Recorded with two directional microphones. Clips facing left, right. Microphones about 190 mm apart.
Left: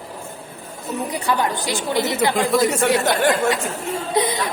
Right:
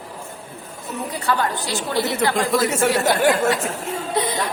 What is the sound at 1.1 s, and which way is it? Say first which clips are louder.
A woman's voice: even; 15° left (ahead or behind).